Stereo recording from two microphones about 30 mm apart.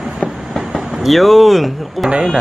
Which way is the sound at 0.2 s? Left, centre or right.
Centre.